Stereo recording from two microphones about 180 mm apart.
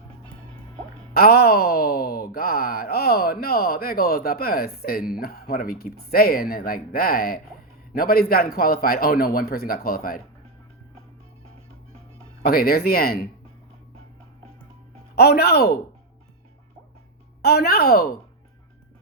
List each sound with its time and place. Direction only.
1.1 s speech: 60° left (ahead or behind)
12.4 s speech: 55° left (ahead or behind)
15.1 s speech: 60° left (ahead or behind)
17.4 s speech: 60° left (ahead or behind)